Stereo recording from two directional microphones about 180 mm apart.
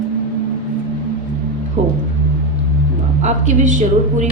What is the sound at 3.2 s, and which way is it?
Speech, 40° right (ahead or behind).